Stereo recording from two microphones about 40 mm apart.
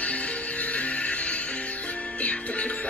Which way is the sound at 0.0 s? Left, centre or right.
Left.